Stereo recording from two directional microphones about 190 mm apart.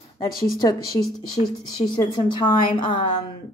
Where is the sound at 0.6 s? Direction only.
20° left (ahead or behind).